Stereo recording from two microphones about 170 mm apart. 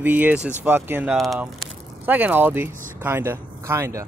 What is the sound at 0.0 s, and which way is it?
Speech, 10° right (ahead or behind).